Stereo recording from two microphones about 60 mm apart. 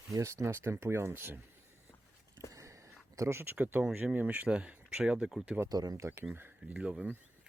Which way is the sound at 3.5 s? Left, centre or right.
Right.